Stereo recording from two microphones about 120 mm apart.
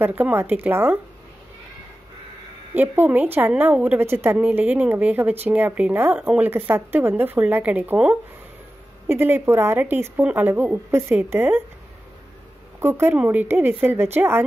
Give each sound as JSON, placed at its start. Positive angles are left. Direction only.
{"t": 0.0, "sound": "a woman's voice", "side_deg": -15}
{"t": 2.7, "sound": "a woman's voice", "side_deg": -15}
{"t": 12.8, "sound": "speech", "side_deg": -20}